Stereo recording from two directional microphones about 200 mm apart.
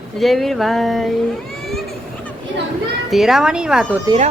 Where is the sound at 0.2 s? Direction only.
Centre (ahead or behind).